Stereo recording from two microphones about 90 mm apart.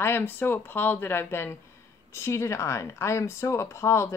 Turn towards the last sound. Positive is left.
turn(degrees=30)  # may be behind; listen again after turning